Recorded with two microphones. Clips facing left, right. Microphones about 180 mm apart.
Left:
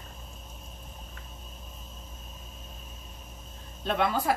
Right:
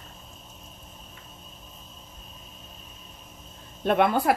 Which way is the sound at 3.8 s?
60° right (ahead or behind).